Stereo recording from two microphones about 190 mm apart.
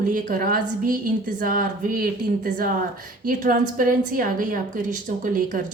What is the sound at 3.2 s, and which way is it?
A woman's voice, 45° right (ahead or behind).